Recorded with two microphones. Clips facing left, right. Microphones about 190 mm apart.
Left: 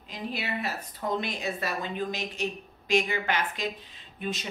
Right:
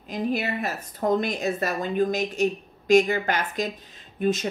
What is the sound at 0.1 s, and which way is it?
A woman's voice, 45° right (ahead or behind).